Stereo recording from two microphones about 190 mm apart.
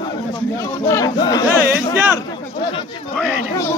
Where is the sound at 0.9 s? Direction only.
20° left (ahead or behind).